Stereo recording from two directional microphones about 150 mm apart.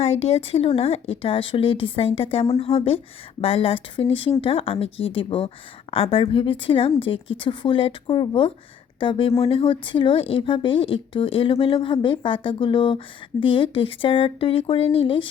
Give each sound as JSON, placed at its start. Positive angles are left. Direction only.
{"t": 0.0, "sound": "speech", "side_deg": 45}